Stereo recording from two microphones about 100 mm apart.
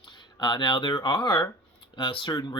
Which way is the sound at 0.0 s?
50° left (ahead or behind).